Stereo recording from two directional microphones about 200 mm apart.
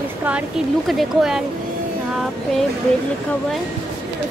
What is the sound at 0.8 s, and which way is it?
Speech, centre (ahead or behind).